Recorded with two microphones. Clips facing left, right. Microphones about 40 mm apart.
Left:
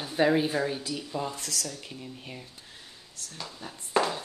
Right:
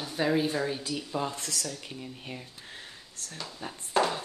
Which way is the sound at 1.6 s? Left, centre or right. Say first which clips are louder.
Right 1 dB; centre.